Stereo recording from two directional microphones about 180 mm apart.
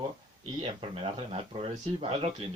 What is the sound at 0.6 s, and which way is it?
Speech, 30° right (ahead or behind).